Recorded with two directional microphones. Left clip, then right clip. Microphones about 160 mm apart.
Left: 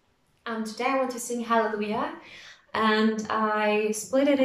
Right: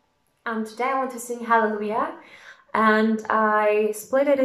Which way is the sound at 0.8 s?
10° left (ahead or behind).